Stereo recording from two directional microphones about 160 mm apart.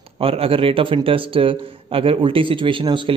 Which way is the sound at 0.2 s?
35° right (ahead or behind).